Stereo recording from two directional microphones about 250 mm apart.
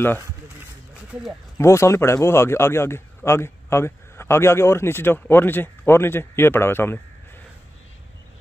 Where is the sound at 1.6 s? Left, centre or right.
Centre.